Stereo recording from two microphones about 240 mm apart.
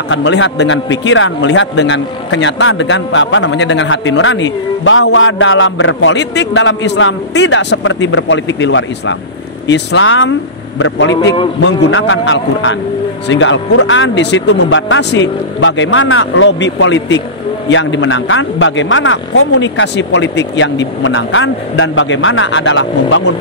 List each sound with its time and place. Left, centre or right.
0.1 s speech: left
11.6 s speech: left